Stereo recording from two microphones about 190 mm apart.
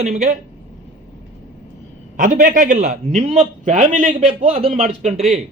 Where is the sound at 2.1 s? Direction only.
45° right (ahead or behind).